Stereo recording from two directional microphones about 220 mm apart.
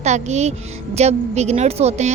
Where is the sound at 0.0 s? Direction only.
30° right (ahead or behind).